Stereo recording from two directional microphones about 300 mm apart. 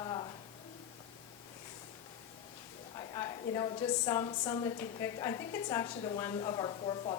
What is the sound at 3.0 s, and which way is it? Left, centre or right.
A woman's voice, centre.